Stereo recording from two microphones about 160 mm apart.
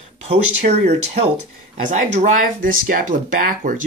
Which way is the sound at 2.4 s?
60° right (ahead or behind).